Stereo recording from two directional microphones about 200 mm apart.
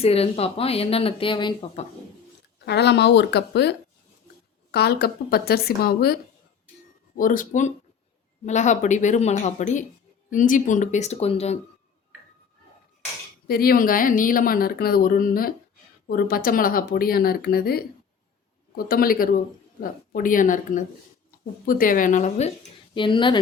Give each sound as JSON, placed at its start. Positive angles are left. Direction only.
{"t": 0.0, "sound": "speech", "side_deg": 30}
{"t": 2.6, "sound": "speech", "side_deg": 60}
{"t": 7.2, "sound": "a woman's voice", "side_deg": 40}
{"t": 13.5, "sound": "speech", "side_deg": 50}
{"t": 18.9, "sound": "speech", "side_deg": 45}
{"t": 23.0, "sound": "speech", "side_deg": 25}